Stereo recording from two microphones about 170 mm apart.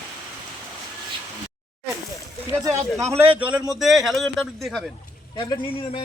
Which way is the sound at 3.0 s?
15° right (ahead or behind).